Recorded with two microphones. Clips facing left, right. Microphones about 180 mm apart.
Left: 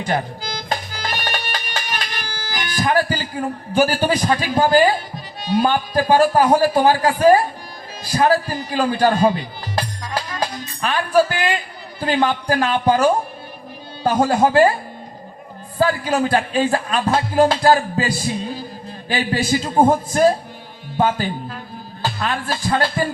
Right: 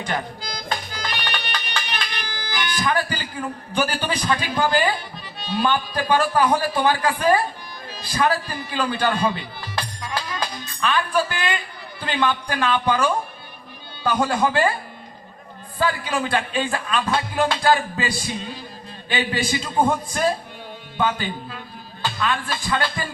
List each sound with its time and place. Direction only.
0.7 s music: 40° left (ahead or behind)
3.4 s speech: 45° left (ahead or behind)
15.8 s speech: 40° left (ahead or behind)
21.0 s speech: 40° left (ahead or behind)